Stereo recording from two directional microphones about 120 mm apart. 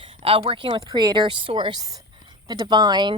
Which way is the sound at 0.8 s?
35° right (ahead or behind).